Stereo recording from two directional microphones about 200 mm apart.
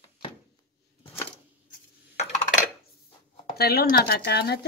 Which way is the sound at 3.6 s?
50° left (ahead or behind).